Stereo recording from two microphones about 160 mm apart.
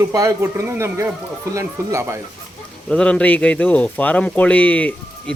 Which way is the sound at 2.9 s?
5° left (ahead or behind).